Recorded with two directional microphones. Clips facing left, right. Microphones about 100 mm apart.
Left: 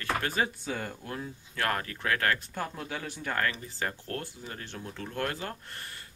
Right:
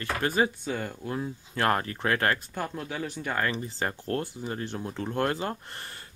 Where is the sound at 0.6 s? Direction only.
Centre (ahead or behind).